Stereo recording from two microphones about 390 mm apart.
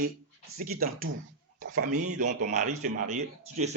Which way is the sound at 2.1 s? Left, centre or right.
Centre.